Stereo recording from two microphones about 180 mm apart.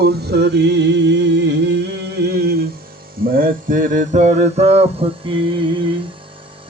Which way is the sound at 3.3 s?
50° right (ahead or behind).